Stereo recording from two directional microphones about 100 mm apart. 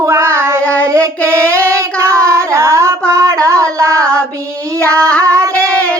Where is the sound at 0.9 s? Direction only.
30° right (ahead or behind).